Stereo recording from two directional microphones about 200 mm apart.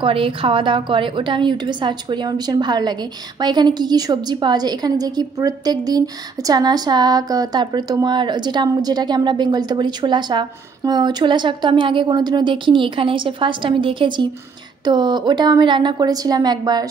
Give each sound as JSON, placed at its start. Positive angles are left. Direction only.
{"t": 0.0, "sound": "a woman's voice", "side_deg": -25}